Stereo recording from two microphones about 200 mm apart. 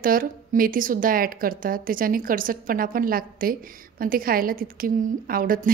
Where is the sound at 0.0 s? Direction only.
45° right (ahead or behind).